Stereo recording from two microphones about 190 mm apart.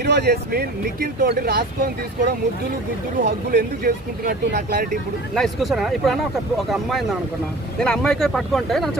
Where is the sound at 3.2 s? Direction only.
60° right (ahead or behind).